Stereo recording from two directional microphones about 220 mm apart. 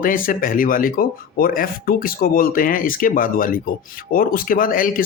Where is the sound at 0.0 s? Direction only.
40° left (ahead or behind).